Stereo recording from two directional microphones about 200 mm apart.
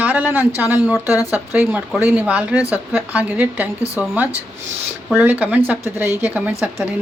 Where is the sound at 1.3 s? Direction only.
10° right (ahead or behind).